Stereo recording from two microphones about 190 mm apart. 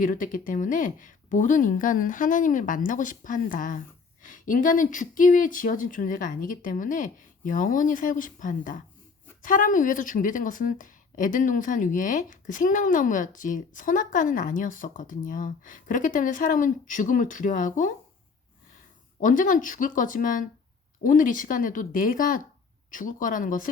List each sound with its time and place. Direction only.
0.0 s speech: 45° left (ahead or behind)
19.2 s speech: 45° left (ahead or behind)